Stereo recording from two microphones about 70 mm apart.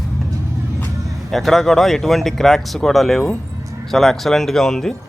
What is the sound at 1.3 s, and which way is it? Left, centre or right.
Speech, centre.